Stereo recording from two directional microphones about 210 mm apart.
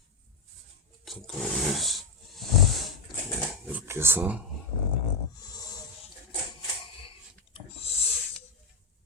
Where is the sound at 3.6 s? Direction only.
10° right (ahead or behind).